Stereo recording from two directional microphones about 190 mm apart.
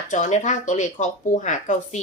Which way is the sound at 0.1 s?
40° left (ahead or behind).